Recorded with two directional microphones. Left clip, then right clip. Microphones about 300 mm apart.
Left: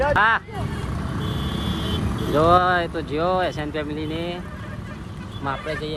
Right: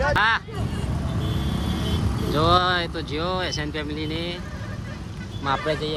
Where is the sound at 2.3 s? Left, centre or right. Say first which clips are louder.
Left 3 dB; centre.